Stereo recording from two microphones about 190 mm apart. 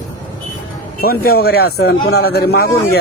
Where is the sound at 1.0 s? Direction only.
50° left (ahead or behind).